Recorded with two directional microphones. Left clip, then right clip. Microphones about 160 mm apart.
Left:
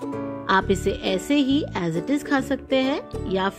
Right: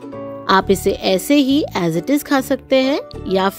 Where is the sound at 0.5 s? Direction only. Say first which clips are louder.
Right 7 dB; 35° right (ahead or behind).